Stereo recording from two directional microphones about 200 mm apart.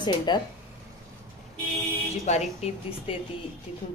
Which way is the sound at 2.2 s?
30° left (ahead or behind).